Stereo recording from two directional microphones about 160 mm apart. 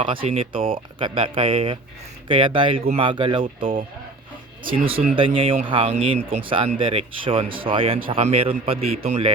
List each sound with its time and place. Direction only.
0.0 s speech: 35° right (ahead or behind)
5.1 s speech: 35° right (ahead or behind)